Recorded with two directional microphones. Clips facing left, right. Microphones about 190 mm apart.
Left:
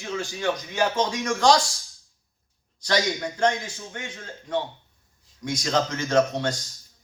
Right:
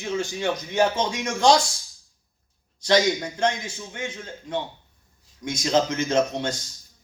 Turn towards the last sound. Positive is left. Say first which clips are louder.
# left 1 dB
turn(degrees=-20)  # may be behind; listen again after turning